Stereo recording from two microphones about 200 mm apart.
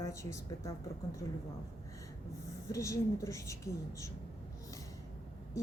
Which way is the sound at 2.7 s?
15° left (ahead or behind).